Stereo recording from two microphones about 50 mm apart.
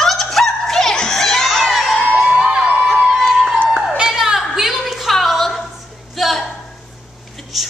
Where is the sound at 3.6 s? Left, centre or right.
Centre.